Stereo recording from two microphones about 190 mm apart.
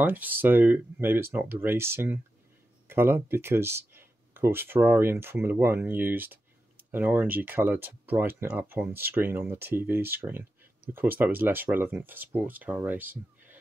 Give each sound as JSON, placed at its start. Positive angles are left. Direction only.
{"t": 0.0, "sound": "speech", "side_deg": -10}